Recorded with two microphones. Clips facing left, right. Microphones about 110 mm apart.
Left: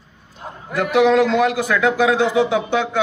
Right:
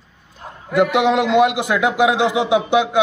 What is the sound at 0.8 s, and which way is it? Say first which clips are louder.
A man's voice: left 1 dB; 20° right (ahead or behind).